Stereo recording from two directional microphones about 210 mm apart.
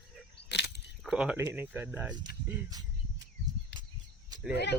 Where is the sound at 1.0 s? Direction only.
5° right (ahead or behind).